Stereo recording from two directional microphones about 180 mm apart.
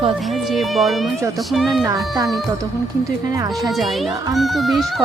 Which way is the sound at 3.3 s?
20° right (ahead or behind).